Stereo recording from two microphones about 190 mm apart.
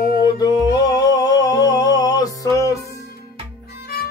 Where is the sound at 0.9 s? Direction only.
20° left (ahead or behind).